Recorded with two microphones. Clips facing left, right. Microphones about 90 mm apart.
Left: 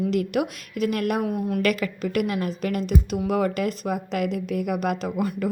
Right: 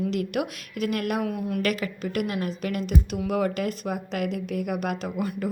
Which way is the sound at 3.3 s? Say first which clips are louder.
Left 1 dB; 50° left (ahead or behind).